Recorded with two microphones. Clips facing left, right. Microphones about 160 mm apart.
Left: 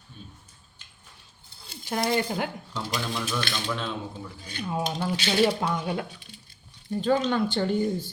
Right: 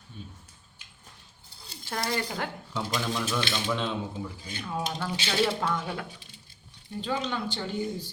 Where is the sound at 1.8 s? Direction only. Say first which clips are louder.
Left 5 dB; 15° left (ahead or behind).